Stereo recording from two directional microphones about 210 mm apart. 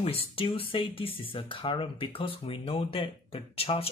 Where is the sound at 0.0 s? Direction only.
25° left (ahead or behind).